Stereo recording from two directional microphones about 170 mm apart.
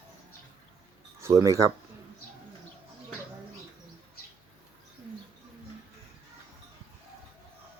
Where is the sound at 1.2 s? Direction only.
20° right (ahead or behind).